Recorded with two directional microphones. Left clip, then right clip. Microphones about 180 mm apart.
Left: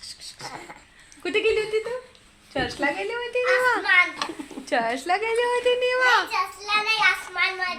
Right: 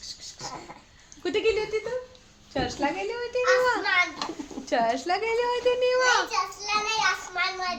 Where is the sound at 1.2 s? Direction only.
10° left (ahead or behind).